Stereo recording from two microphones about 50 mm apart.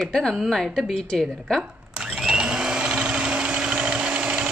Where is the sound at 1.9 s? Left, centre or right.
Centre.